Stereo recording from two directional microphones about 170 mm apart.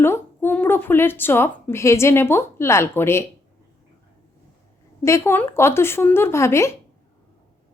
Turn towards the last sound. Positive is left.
turn(degrees=15)  # may be behind; listen again after turning